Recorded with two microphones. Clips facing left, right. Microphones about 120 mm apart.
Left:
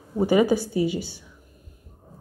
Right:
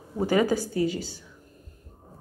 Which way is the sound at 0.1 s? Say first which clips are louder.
Left 4 dB; 15° left (ahead or behind).